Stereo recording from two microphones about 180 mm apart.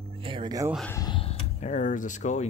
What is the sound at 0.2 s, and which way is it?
Music, 25° right (ahead or behind).